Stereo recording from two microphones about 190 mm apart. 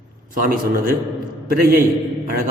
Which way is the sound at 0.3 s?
50° right (ahead or behind).